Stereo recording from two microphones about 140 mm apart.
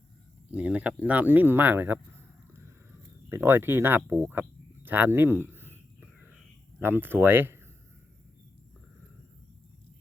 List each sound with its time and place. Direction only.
0.5 s speech: 10° right (ahead or behind)
3.2 s a sound: 15° right (ahead or behind)
6.7 s speech: 15° right (ahead or behind)